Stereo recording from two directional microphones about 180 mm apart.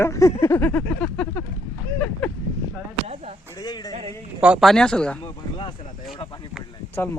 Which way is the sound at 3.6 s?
20° left (ahead or behind).